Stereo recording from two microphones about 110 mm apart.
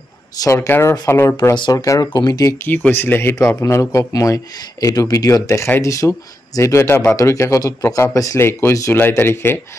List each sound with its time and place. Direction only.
0.4 s speech: 25° left (ahead or behind)
1.5 s speech: 40° left (ahead or behind)
2.7 s speech: 20° left (ahead or behind)